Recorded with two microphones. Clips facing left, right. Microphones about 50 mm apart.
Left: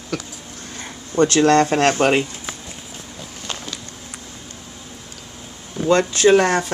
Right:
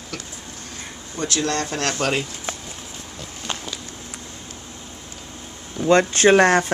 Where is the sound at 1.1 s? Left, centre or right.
Left.